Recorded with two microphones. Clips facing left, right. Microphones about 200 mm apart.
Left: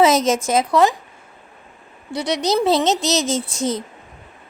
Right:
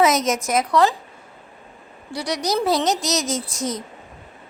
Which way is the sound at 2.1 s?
25° left (ahead or behind).